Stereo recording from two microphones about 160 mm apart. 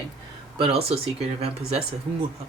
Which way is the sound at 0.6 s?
40° right (ahead or behind).